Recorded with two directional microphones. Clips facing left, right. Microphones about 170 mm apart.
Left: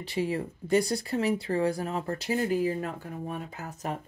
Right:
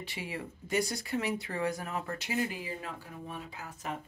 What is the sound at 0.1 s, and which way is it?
Speech, 40° left (ahead or behind).